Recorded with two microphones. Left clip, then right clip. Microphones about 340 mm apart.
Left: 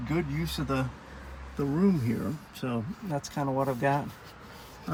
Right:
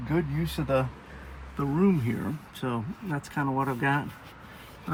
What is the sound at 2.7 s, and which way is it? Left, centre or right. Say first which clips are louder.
Speech: even; centre.